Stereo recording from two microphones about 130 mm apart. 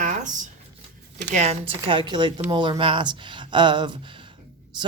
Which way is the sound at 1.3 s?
60° right (ahead or behind).